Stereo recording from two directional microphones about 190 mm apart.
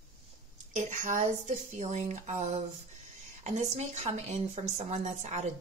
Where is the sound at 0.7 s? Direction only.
40° right (ahead or behind).